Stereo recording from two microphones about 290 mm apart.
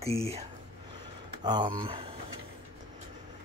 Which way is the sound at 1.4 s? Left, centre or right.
Centre.